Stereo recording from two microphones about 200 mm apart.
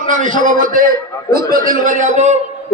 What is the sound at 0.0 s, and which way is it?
A man's voice, 40° right (ahead or behind).